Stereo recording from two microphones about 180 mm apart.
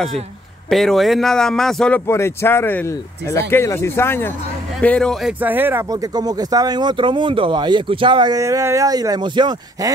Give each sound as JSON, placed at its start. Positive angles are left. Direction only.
{"t": 0.7, "sound": "speech", "side_deg": 0}
{"t": 5.4, "sound": "speech", "side_deg": -10}